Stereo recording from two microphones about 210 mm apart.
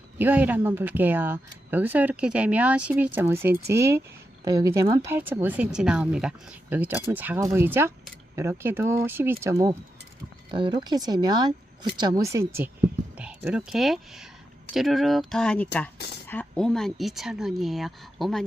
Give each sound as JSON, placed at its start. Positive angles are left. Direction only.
{"t": 0.2, "sound": "speech", "side_deg": -5}